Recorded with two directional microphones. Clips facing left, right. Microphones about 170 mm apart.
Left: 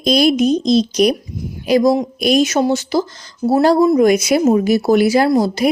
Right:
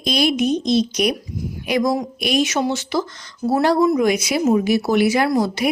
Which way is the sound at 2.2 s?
40° left (ahead or behind).